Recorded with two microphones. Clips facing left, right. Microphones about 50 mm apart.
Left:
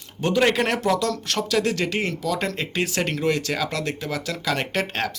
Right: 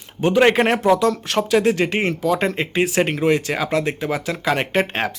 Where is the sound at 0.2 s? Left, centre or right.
Right.